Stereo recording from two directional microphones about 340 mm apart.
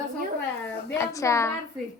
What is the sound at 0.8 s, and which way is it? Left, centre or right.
Speech, centre.